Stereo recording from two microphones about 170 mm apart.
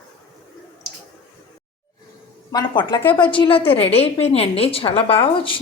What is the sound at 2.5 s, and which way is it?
A woman's voice, 25° left (ahead or behind).